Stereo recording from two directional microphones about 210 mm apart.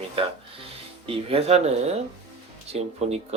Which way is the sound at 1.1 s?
25° right (ahead or behind).